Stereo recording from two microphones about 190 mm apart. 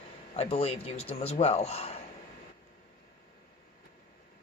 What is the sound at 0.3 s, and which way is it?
A man's voice, 30° left (ahead or behind).